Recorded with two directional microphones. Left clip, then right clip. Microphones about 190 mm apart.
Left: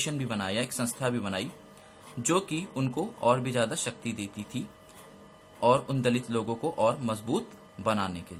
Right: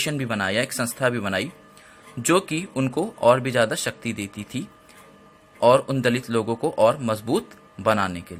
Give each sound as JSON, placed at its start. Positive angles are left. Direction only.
{"t": 0.0, "sound": "speech", "side_deg": -35}